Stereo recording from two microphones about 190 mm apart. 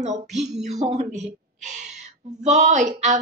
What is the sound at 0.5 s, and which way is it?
A woman's voice, 40° right (ahead or behind).